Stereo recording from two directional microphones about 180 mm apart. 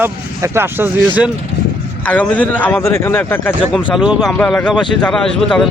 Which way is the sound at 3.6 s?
Centre (ahead or behind).